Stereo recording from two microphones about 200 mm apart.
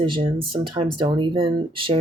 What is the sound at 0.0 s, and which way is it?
Speech, 25° right (ahead or behind).